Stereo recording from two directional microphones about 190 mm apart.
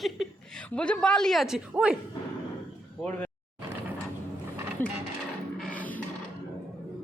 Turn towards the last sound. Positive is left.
turn(degrees=10)  # may be behind; listen again after turning